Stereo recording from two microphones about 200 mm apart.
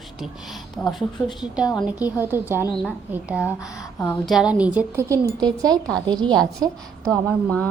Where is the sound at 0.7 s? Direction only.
Centre (ahead or behind).